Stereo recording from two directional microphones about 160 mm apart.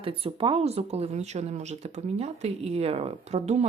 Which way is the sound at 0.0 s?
35° right (ahead or behind).